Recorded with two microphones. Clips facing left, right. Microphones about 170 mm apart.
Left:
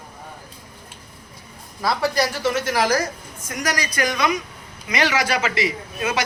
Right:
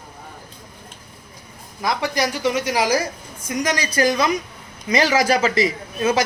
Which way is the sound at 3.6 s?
25° right (ahead or behind).